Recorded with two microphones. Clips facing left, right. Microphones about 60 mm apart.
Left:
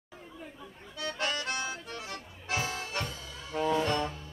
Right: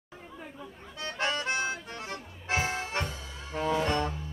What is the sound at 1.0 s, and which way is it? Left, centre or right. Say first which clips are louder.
Accordion: right 2 dB; right.